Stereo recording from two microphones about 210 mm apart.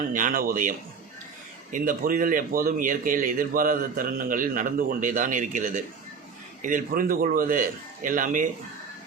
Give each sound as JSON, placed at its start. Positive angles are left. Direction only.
{"t": 0.1, "sound": "a man's voice", "side_deg": -40}
{"t": 1.7, "sound": "a man's voice", "side_deg": -40}